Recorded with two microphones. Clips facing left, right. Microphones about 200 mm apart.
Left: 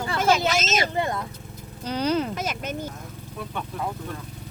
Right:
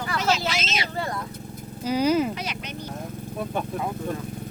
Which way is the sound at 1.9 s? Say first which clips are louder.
Right 3 dB; 10° right (ahead or behind).